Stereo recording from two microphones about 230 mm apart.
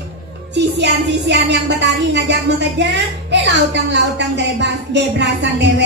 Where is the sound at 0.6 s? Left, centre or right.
Right.